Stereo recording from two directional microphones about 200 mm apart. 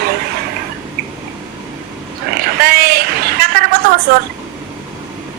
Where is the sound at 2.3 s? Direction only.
50° right (ahead or behind).